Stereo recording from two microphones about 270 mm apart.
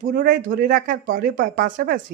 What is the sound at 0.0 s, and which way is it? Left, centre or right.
Speech, right.